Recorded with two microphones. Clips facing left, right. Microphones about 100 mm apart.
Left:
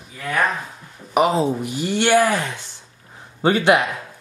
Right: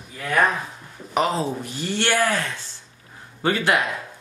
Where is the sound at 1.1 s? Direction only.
15° left (ahead or behind).